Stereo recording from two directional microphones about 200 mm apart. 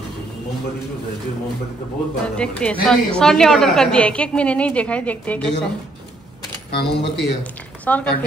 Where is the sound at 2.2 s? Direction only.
5° left (ahead or behind).